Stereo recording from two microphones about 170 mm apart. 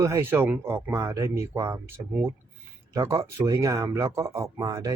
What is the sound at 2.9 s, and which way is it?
Speech, 20° right (ahead or behind).